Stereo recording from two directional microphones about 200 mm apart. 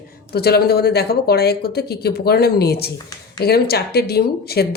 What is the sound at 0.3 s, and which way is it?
Speech, 50° left (ahead or behind).